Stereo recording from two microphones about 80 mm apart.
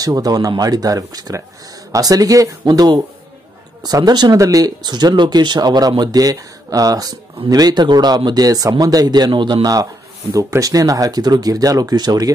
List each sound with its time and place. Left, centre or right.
0.0 s speech: right
8.5 s speech: right
10.3 s speech: right